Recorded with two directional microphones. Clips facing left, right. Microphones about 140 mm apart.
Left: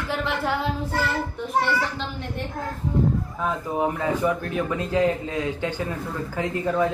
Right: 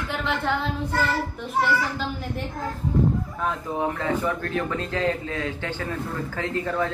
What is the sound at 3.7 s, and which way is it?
A man's voice, 15° left (ahead or behind).